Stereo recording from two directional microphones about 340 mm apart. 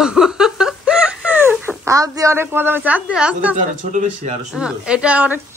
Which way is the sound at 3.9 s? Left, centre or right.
Right.